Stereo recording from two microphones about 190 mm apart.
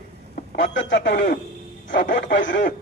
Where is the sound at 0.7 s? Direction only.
70° left (ahead or behind).